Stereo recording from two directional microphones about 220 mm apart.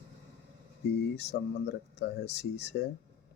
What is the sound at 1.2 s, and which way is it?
Speech, 50° left (ahead or behind).